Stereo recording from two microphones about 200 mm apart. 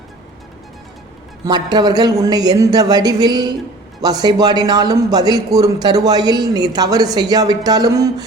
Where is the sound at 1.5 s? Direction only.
20° right (ahead or behind).